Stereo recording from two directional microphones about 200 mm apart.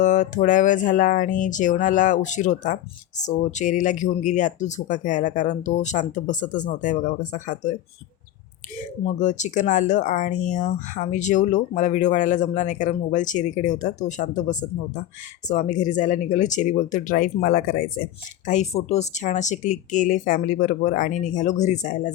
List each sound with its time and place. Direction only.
0.0 s speech: 40° left (ahead or behind)
8.8 s speech: 35° left (ahead or behind)